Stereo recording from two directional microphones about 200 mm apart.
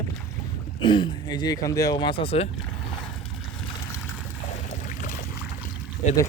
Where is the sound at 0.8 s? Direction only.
25° left (ahead or behind).